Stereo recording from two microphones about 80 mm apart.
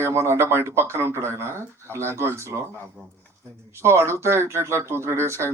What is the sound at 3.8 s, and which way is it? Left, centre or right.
Speech, right.